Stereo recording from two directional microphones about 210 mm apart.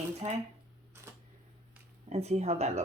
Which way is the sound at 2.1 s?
30° right (ahead or behind).